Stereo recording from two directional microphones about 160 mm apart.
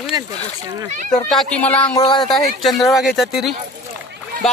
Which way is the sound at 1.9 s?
25° left (ahead or behind).